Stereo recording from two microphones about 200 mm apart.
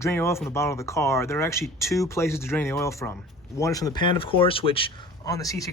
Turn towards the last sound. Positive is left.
turn(degrees=15)  # may be behind; listen again after turning